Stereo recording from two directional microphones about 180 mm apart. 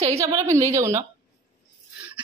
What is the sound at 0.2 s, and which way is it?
Speech, 15° right (ahead or behind).